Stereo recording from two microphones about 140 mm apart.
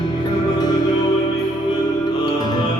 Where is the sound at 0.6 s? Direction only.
30° left (ahead or behind).